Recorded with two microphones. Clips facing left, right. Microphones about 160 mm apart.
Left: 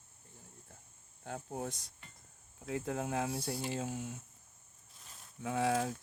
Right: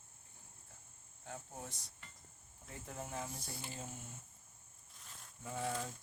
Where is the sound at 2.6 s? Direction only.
70° left (ahead or behind).